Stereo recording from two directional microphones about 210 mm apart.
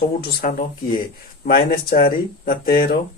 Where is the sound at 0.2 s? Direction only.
45° left (ahead or behind).